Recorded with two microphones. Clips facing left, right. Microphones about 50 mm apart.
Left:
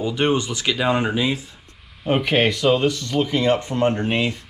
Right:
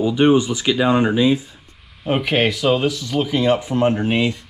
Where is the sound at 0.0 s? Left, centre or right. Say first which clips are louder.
Right 6 dB; centre.